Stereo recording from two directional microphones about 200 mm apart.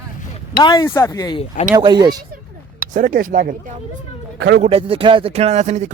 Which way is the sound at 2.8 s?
40° right (ahead or behind).